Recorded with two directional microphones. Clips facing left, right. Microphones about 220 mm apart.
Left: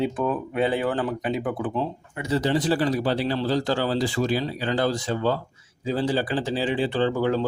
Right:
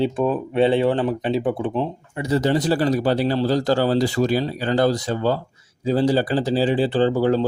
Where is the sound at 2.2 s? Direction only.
45° right (ahead or behind).